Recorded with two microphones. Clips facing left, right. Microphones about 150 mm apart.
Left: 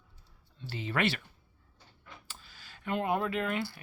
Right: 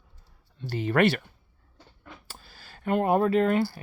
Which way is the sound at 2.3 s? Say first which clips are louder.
Right 4 dB; 40° right (ahead or behind).